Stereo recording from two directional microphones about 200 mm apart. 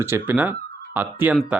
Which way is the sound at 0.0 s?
10° right (ahead or behind).